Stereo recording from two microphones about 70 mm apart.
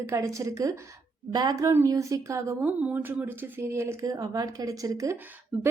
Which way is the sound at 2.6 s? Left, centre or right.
Right.